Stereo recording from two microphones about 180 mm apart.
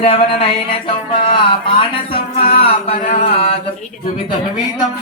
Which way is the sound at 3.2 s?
35° left (ahead or behind).